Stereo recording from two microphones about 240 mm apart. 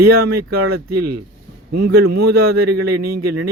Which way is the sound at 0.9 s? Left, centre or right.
Right.